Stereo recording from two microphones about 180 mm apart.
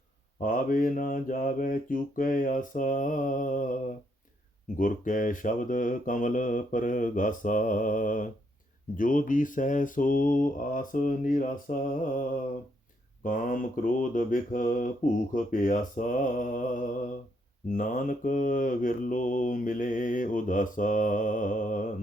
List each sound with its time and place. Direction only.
0.3 s mantra: 50° left (ahead or behind)
4.8 s mantra: 45° left (ahead or behind)